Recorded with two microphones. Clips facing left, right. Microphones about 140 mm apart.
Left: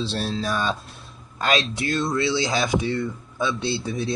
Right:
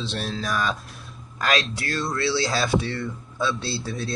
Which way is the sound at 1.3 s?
25° left (ahead or behind).